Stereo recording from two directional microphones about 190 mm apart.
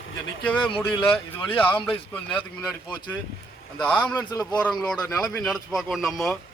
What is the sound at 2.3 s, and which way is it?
Speech, 5° left (ahead or behind).